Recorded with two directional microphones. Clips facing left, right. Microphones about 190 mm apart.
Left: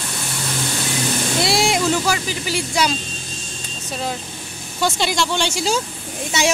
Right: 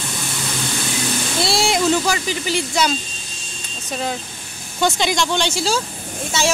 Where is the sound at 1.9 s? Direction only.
5° left (ahead or behind).